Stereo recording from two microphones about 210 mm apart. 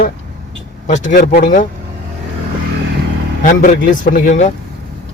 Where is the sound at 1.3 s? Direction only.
40° left (ahead or behind).